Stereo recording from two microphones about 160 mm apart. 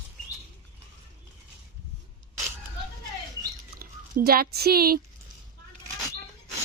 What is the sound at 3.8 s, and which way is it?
Speech, 70° right (ahead or behind).